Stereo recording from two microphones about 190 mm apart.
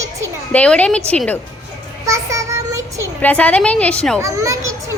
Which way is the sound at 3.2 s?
10° left (ahead or behind).